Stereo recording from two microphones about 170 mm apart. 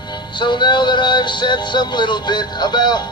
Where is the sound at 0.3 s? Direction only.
25° left (ahead or behind).